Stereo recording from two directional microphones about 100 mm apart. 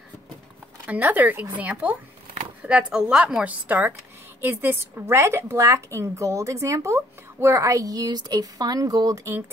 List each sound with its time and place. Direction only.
0.8 s a woman's voice: 15° right (ahead or behind); by 9.4 s 30° right (ahead or behind)